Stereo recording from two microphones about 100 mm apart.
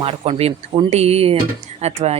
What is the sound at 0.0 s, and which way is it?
Speech, 75° right (ahead or behind).